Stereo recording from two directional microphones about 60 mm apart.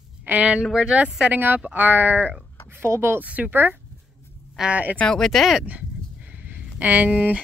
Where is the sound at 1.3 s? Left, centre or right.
Right.